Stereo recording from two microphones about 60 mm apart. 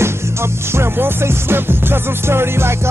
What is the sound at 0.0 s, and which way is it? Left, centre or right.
Music, right.